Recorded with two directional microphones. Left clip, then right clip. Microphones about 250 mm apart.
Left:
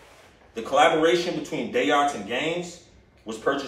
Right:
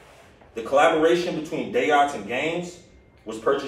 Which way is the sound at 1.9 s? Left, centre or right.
Centre.